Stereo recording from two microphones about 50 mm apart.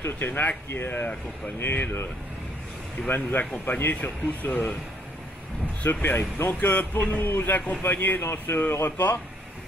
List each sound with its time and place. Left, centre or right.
0.0 s speech: left
3.1 s speech: left
5.8 s speech: left
6.6 s speech: left
8.2 s speech: left
8.8 s speech: left